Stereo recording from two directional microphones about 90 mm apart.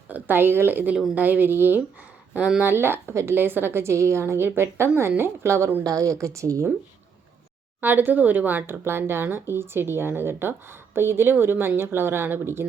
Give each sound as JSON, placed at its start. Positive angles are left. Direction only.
{"t": 0.1, "sound": "a woman's voice", "side_deg": -25}
{"t": 7.8, "sound": "speech", "side_deg": -20}